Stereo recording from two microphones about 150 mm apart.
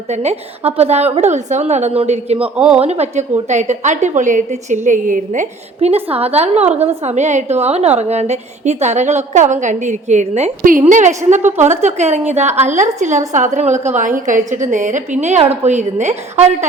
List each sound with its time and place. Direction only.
0.1 s a woman's voice: 45° right (ahead or behind)
2.4 s a woman's voice: 5° right (ahead or behind)
2.8 s a woman's voice: 45° right (ahead or behind)
10.6 s a woman's voice: 60° right (ahead or behind); by 16.6 s 45° right (ahead or behind)